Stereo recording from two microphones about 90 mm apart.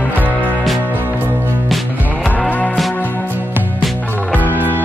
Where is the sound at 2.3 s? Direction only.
20° left (ahead or behind).